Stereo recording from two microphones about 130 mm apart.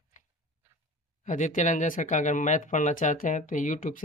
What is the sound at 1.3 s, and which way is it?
Speech, 75° left (ahead or behind).